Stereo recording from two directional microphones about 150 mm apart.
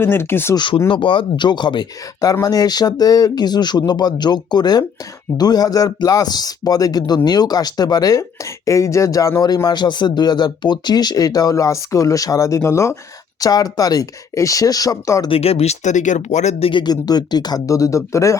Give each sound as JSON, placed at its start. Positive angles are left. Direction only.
{"t": 0.0, "sound": "speech", "side_deg": 15}
{"t": 0.5, "sound": "a man's voice", "side_deg": 30}
{"t": 15.3, "sound": "speech", "side_deg": 40}